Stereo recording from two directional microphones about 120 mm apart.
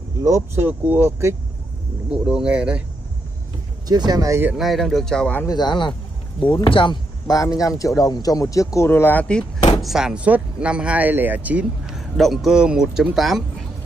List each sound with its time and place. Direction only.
0.2 s speech: 25° right (ahead or behind)
0.7 s speech: 15° right (ahead or behind)
3.8 s speech: 35° right (ahead or behind)
4.6 s speech: centre (ahead or behind)
5.4 s speech: 35° left (ahead or behind)
7.2 s a man's voice: 30° left (ahead or behind); by 9.5 s 10° left (ahead or behind)
9.8 s speech: 5° right (ahead or behind)